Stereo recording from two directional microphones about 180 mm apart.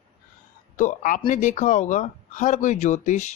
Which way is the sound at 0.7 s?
45° left (ahead or behind).